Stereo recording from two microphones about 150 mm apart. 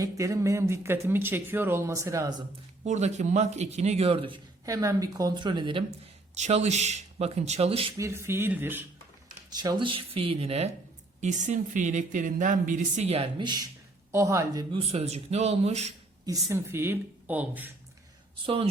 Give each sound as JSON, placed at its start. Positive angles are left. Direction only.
{"t": 0.0, "sound": "speech", "side_deg": -20}
{"t": 2.8, "sound": "a man's voice", "side_deg": -50}
{"t": 4.7, "sound": "speech", "side_deg": -20}
{"t": 6.3, "sound": "a man's voice", "side_deg": -50}
{"t": 7.9, "sound": "speech", "side_deg": -20}
{"t": 9.5, "sound": "speech", "side_deg": -30}
{"t": 11.2, "sound": "speech", "side_deg": -55}
{"t": 13.4, "sound": "speech", "side_deg": -30}
{"t": 14.9, "sound": "a man's voice", "side_deg": -45}
{"t": 16.5, "sound": "speech", "side_deg": -15}
{"t": 18.4, "sound": "speech", "side_deg": -40}